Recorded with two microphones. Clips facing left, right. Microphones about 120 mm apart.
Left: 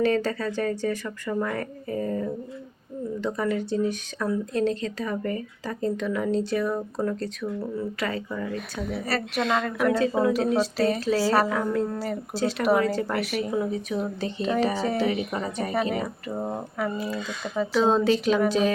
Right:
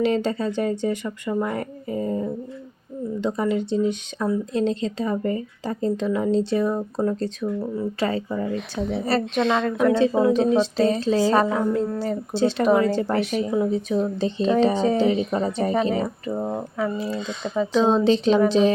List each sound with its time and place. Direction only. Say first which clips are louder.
0.0 s speech: right 2 dB; 20° right (ahead or behind)
16.4 s speech: right 2 dB; centre (ahead or behind)
17.0 s speech: right 3 dB; 25° right (ahead or behind)